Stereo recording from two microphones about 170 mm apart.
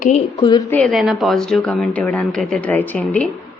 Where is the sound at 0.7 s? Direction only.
5° left (ahead or behind).